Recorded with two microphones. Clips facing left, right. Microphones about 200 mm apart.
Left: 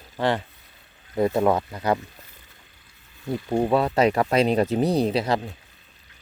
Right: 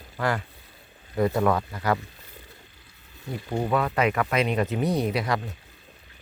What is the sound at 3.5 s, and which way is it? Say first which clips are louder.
Speech: left 4 dB; 30° left (ahead or behind).